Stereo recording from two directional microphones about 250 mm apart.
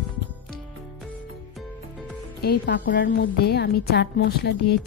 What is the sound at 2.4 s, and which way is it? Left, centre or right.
A woman's voice, left.